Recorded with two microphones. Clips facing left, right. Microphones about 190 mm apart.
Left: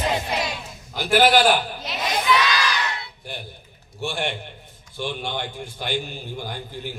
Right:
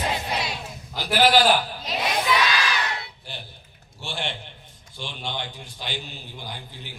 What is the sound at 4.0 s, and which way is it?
A man's voice, 55° left (ahead or behind).